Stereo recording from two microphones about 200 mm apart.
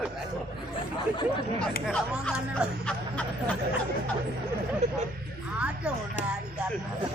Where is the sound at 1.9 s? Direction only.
5° left (ahead or behind).